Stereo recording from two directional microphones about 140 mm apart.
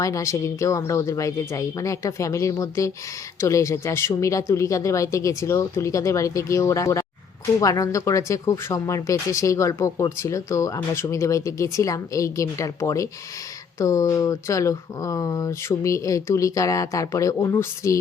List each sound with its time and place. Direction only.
0.0 s speech: 20° left (ahead or behind)